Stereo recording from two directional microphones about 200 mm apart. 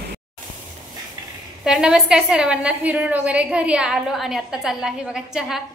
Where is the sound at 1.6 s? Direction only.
5° right (ahead or behind).